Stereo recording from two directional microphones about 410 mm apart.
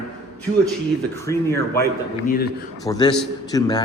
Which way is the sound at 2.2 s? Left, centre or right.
Left.